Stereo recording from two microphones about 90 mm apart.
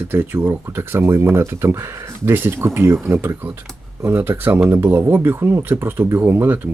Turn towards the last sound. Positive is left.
turn(degrees=-20)  # may be behind; listen again after turning